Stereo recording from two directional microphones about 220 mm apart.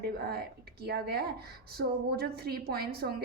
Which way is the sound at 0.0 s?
45° right (ahead or behind).